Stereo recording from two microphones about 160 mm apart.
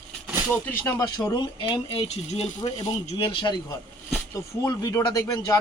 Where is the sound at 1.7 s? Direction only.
35° left (ahead or behind).